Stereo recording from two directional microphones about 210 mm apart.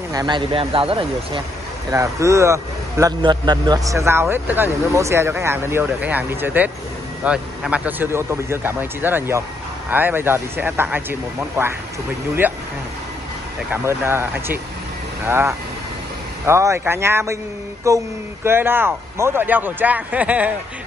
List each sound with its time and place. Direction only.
0.1 s a man's voice: 20° right (ahead or behind)
13.8 s a man's voice: 10° right (ahead or behind)